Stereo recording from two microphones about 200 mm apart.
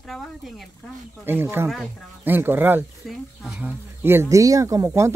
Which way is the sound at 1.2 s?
10° right (ahead or behind).